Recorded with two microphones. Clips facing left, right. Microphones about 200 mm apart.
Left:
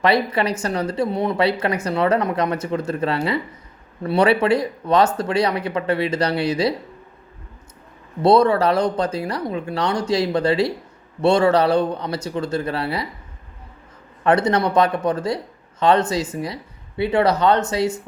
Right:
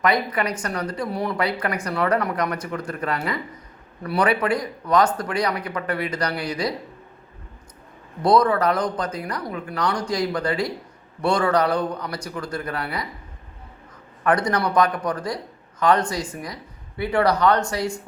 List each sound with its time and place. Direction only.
0.0 s speech: 30° left (ahead or behind)
8.2 s speech: 25° left (ahead or behind)
14.3 s speech: 25° left (ahead or behind)